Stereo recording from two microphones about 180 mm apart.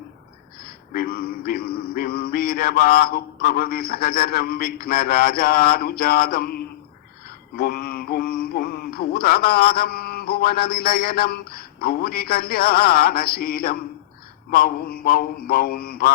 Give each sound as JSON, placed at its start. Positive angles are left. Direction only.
{"t": 0.9, "sound": "mantra", "side_deg": 55}